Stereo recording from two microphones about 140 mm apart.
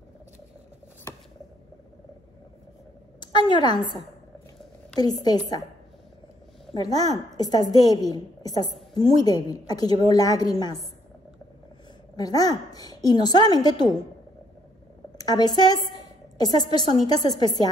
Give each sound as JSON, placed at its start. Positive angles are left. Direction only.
{"t": 3.2, "sound": "a woman's voice", "side_deg": 35}
{"t": 5.0, "sound": "a woman's voice", "side_deg": 30}
{"t": 6.7, "sound": "a woman's voice", "side_deg": 25}
{"t": 12.2, "sound": "a woman's voice", "side_deg": 25}
{"t": 15.1, "sound": "a woman's voice", "side_deg": 30}